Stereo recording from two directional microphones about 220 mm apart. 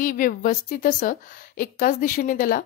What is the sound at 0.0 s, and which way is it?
A woman's voice, 40° left (ahead or behind).